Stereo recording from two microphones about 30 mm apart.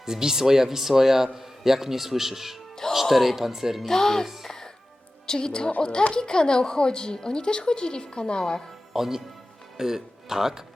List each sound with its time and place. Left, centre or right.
0.0 s a man's voice: centre
3.8 s speech: centre
4.4 s music: centre
5.2 s a woman's voice: left
8.9 s speech: centre